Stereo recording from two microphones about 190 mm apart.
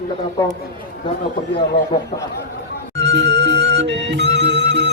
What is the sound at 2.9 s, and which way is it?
Music, 65° right (ahead or behind).